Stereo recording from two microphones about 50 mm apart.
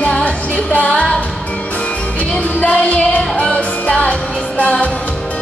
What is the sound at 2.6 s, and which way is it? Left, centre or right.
Music, left.